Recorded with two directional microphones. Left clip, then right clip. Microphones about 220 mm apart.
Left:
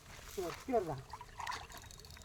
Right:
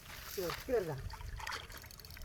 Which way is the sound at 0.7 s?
5° right (ahead or behind).